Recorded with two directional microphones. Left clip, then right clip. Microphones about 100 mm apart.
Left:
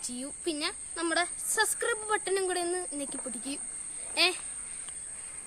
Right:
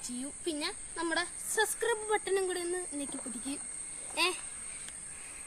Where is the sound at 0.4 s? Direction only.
35° left (ahead or behind).